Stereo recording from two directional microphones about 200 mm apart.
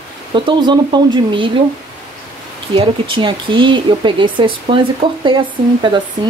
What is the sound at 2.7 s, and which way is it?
Speech, 25° right (ahead or behind).